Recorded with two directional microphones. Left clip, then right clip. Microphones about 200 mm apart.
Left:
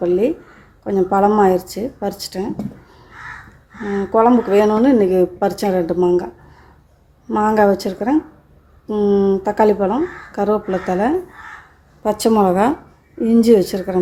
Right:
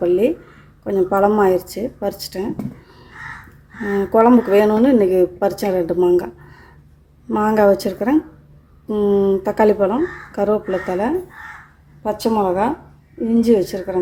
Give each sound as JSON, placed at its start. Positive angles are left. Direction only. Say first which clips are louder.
{"t": 0.0, "sound": "speech", "louder": "even", "side_deg": -5}
{"t": 3.8, "sound": "speech", "louder": "right 1 dB", "side_deg": -15}
{"t": 12.0, "sound": "a woman's voice", "louder": "left 3 dB", "side_deg": 15}